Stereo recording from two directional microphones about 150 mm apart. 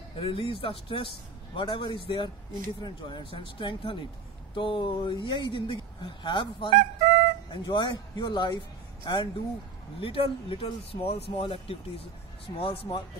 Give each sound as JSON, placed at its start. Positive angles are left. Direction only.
{"t": 0.2, "sound": "speech", "side_deg": 35}
{"t": 6.7, "sound": "speech", "side_deg": -60}
{"t": 7.5, "sound": "speech", "side_deg": 30}